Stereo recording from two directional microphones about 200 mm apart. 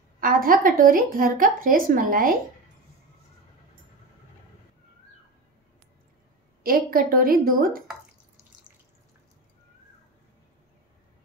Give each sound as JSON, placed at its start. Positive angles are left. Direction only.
{"t": 0.2, "sound": "speech", "side_deg": -45}
{"t": 6.6, "sound": "speech", "side_deg": -45}